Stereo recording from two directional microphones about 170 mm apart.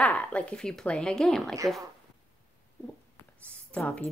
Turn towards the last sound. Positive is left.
turn(degrees=5)  # may be behind; listen again after turning